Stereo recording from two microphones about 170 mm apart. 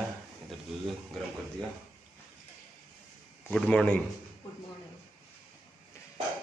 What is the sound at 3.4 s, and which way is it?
Speech, 5° left (ahead or behind).